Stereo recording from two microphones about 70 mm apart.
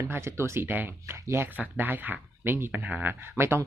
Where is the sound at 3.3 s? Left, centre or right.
Right.